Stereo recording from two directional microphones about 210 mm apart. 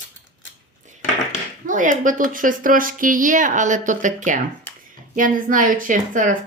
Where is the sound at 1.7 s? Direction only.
40° right (ahead or behind).